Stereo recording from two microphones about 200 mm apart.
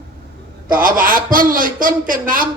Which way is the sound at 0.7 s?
45° right (ahead or behind).